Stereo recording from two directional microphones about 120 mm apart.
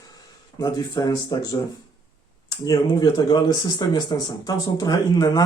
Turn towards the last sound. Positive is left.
turn(degrees=30)  # may be behind; listen again after turning